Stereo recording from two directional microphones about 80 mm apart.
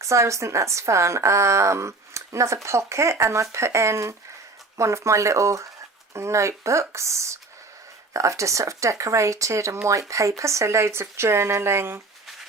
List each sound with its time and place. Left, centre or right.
0.0 s a woman's voice: right